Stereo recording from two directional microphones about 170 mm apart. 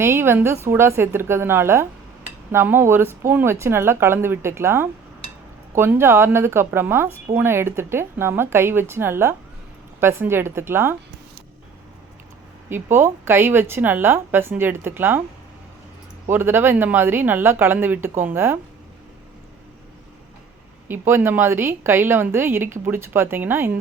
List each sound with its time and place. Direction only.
0.0 s speech: 15° right (ahead or behind)
12.6 s speech: 15° right (ahead or behind)
16.3 s speech: 15° right (ahead or behind)
20.8 s speech: 15° right (ahead or behind)